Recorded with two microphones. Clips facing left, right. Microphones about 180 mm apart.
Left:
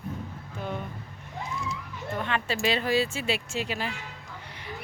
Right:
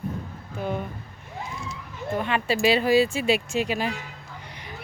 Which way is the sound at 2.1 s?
10° right (ahead or behind).